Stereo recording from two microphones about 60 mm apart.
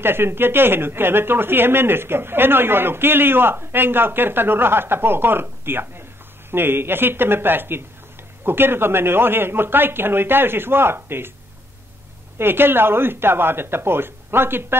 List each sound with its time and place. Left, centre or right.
0.0 s speech: right
12.4 s speech: right